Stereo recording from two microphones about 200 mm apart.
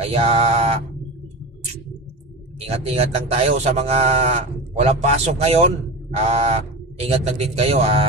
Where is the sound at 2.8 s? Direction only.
30° right (ahead or behind).